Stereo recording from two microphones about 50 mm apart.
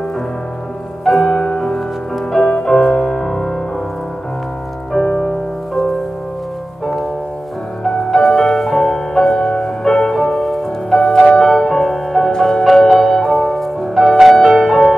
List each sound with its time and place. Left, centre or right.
1.0 s music: centre
5.0 s music: left
7.8 s music: centre
12.6 s music: centre
13.9 s music: centre